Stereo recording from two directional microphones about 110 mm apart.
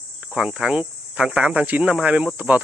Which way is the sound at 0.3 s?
5° right (ahead or behind).